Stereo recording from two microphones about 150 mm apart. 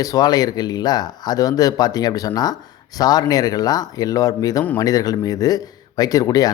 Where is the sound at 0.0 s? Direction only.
25° left (ahead or behind).